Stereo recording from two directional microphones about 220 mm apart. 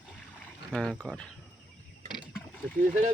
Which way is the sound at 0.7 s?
5° left (ahead or behind).